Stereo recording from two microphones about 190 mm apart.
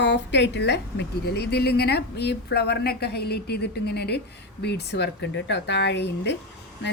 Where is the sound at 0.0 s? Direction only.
65° left (ahead or behind).